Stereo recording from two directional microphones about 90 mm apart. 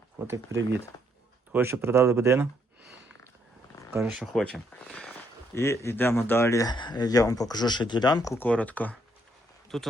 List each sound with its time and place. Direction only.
0.2 s speech: 25° right (ahead or behind)
1.5 s speech: 30° right (ahead or behind)
4.0 s speech: 5° right (ahead or behind)
4.4 s speech: 5° left (ahead or behind)
5.5 s speech: 30° left (ahead or behind)
6.7 s speech: 55° left (ahead or behind)
8.4 s speech: 15° left (ahead or behind)
9.7 s speech: 5° left (ahead or behind)